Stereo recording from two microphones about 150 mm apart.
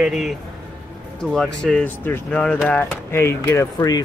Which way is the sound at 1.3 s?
5° left (ahead or behind).